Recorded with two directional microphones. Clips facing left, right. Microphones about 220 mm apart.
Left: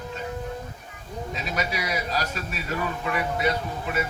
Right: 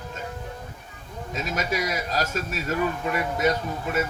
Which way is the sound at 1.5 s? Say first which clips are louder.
Right 2 dB; 45° right (ahead or behind).